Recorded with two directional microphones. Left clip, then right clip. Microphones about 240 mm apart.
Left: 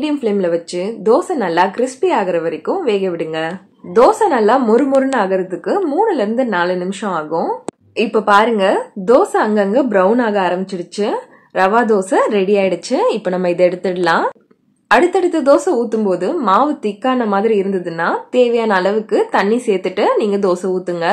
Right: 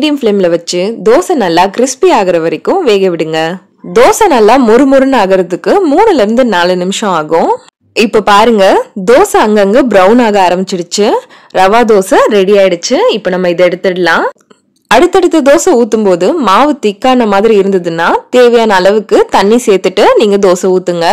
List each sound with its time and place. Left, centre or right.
0.0 s speech: right
14.9 s speech: right